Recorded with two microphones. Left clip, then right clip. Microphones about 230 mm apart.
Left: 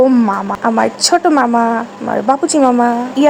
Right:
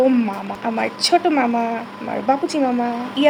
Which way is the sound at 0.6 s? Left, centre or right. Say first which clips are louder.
Left 6 dB; left.